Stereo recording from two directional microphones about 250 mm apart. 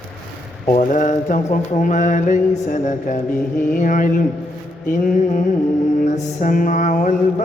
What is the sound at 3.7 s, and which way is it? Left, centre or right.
Music, left.